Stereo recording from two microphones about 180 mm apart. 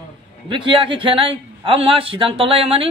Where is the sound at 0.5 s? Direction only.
30° right (ahead or behind).